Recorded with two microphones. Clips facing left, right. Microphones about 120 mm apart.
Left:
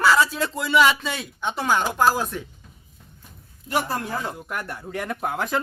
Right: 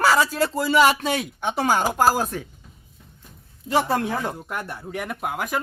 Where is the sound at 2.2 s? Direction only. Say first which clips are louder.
Right 2 dB; 45° right (ahead or behind).